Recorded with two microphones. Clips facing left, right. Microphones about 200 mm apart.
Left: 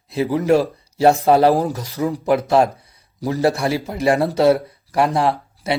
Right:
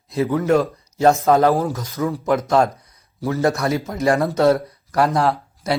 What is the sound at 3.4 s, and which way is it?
Speech, 30° left (ahead or behind).